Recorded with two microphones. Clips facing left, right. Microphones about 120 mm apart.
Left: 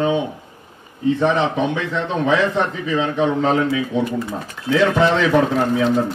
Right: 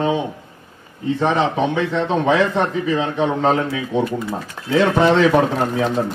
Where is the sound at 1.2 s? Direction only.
35° right (ahead or behind).